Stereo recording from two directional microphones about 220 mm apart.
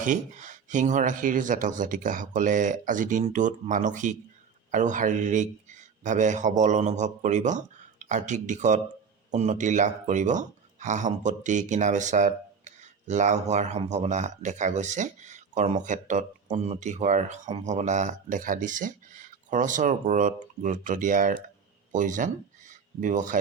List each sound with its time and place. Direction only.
0.0 s speech: 35° right (ahead or behind)